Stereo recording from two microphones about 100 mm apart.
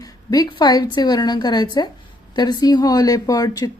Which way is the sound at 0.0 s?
40° left (ahead or behind).